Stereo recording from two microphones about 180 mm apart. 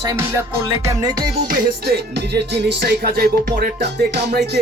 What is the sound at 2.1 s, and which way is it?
Music, 70° right (ahead or behind).